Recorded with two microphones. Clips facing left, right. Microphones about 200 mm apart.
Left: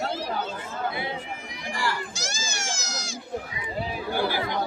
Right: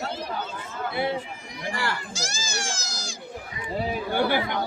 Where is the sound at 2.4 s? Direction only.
35° right (ahead or behind).